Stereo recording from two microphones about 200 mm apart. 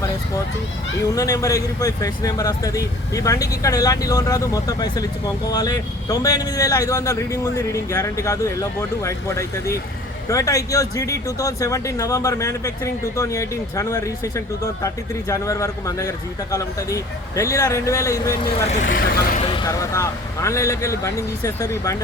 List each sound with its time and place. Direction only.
1.1 s speech: 15° left (ahead or behind)
18.7 s speech: 40° left (ahead or behind)
19.4 s speech: 25° left (ahead or behind)